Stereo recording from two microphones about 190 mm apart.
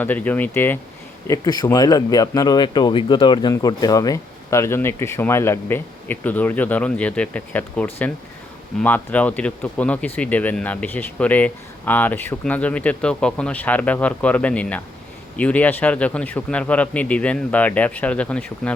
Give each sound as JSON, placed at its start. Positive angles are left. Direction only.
{"t": 0.0, "sound": "speech", "side_deg": 10}
{"t": 1.3, "sound": "a man's voice", "side_deg": 20}